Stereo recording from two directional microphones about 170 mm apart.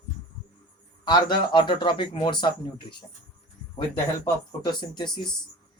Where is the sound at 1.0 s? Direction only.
25° left (ahead or behind).